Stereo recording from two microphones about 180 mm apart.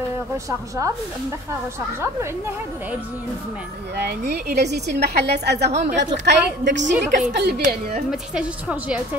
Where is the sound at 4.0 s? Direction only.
65° right (ahead or behind).